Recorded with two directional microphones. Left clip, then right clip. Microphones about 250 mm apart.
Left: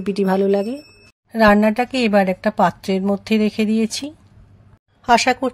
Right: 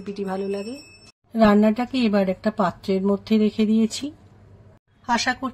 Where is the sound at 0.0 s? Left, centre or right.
Left.